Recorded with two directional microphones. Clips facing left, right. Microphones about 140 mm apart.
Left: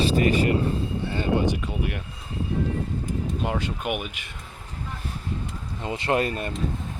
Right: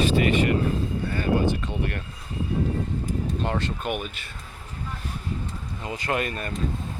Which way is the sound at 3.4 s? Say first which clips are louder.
Left 1 dB; 10° left (ahead or behind).